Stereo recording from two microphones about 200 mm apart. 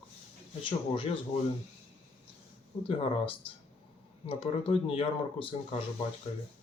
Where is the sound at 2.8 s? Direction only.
30° left (ahead or behind).